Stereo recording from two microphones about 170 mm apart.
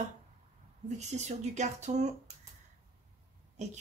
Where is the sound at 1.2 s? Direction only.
40° right (ahead or behind).